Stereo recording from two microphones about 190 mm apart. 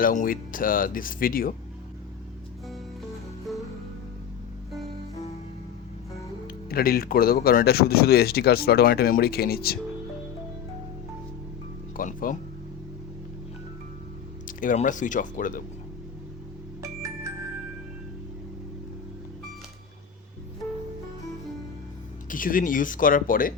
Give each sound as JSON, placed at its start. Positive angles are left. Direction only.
{"t": 0.0, "sound": "speech", "side_deg": 45}
{"t": 6.7, "sound": "speech", "side_deg": 50}
{"t": 11.9, "sound": "speech", "side_deg": 45}
{"t": 14.4, "sound": "speech", "side_deg": 45}
{"t": 16.8, "sound": "organ", "side_deg": -15}
{"t": 22.3, "sound": "speech", "side_deg": 45}